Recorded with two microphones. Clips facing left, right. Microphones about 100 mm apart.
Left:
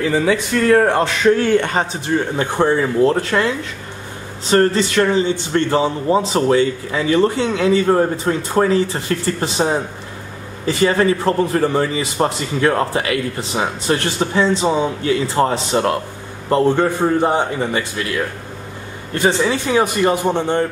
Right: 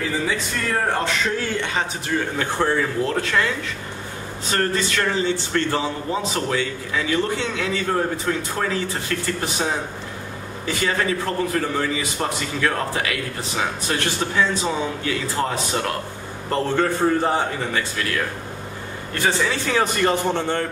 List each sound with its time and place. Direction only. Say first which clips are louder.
0.3 s speech: left 10 dB; 70° left (ahead or behind)
1.5 s a man's voice: left 10 dB; 50° left (ahead or behind)
1.8 s a man's voice: left 5 dB; 25° left (ahead or behind)
3.0 s a man's voice: left 6 dB; 30° left (ahead or behind)
16.4 s a man's voice: left 6 dB; 15° left (ahead or behind)
19.2 s a man's voice: left 5 dB; 20° left (ahead or behind)